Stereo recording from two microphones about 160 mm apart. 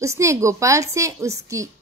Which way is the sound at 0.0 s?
20° right (ahead or behind).